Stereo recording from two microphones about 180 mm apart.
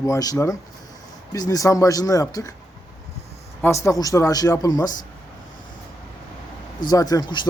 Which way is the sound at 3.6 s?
15° left (ahead or behind).